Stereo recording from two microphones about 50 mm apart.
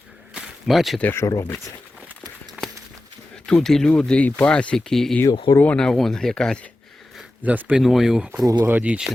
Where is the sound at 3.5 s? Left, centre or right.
Centre.